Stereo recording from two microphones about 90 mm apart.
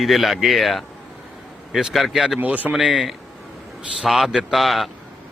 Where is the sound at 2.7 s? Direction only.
5° right (ahead or behind).